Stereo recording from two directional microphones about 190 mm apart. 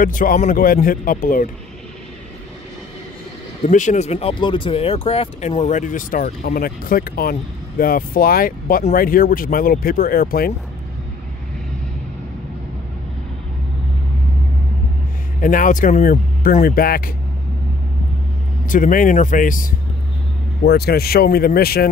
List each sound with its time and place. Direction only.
0.0 s speech: 45° left (ahead or behind)
3.6 s speech: 40° left (ahead or behind)
15.4 s speech: 45° left (ahead or behind)
18.7 s speech: 45° left (ahead or behind)
20.6 s speech: 55° left (ahead or behind)